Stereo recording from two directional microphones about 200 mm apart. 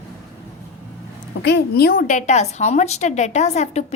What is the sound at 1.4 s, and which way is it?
A woman's voice, 60° left (ahead or behind).